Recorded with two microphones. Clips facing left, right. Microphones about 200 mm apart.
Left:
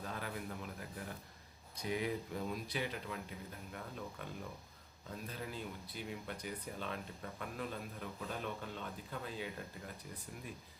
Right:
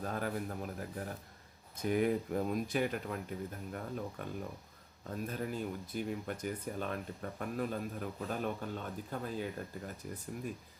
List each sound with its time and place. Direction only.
0.0 s speech: 45° right (ahead or behind)